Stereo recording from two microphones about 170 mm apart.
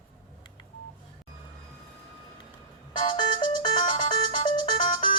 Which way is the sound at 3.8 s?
50° left (ahead or behind).